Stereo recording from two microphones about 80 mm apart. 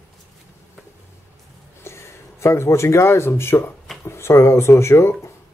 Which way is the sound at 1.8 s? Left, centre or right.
Left.